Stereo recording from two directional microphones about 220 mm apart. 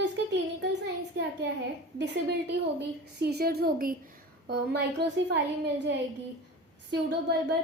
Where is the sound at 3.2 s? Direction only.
45° right (ahead or behind).